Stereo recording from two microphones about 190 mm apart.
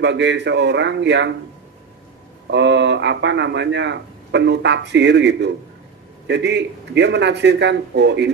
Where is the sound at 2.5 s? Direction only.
65° right (ahead or behind).